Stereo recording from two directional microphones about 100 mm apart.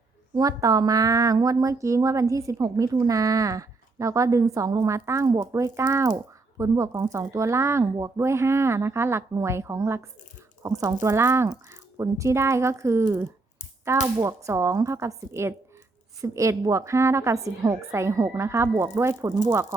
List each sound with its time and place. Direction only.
0.3 s a woman's voice: 40° right (ahead or behind)